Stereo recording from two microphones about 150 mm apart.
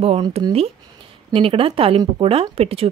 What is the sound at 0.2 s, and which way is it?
Speech, 30° right (ahead or behind).